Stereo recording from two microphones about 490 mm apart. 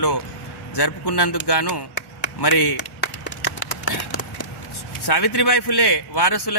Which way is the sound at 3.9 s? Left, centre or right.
Left.